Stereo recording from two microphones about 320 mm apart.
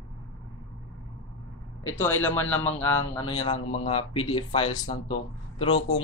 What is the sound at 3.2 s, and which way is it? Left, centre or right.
Speech, centre.